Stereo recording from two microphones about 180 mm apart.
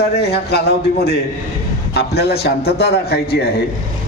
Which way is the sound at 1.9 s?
65° left (ahead or behind).